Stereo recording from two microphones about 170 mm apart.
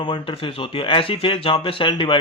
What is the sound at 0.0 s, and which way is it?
Speech, 30° left (ahead or behind).